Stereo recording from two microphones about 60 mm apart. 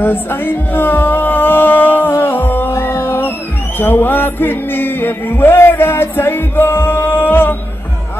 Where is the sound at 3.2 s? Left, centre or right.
Left.